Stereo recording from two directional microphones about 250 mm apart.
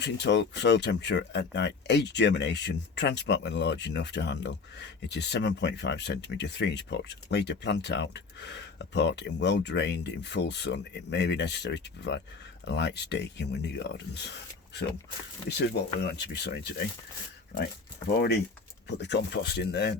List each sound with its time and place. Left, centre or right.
0.0 s speech: left
15.4 s speech: left
18.9 s speech: left